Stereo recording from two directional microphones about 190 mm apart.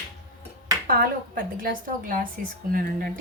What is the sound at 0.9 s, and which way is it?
A woman's voice, 50° right (ahead or behind).